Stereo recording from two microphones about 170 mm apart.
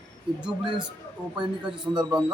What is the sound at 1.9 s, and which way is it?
Speech, 25° right (ahead or behind).